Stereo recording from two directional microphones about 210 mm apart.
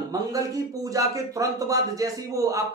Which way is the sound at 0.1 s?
15° right (ahead or behind).